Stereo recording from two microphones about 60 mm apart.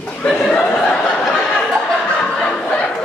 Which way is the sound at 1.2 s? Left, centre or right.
Centre.